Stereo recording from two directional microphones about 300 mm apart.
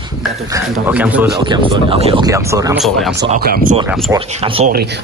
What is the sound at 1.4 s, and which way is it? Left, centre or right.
Speech, centre.